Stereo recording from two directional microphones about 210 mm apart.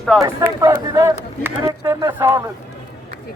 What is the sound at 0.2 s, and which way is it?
Speech, 15° right (ahead or behind).